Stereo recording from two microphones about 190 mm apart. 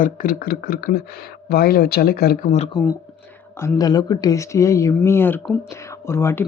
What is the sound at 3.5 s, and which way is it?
Speech, 15° left (ahead or behind).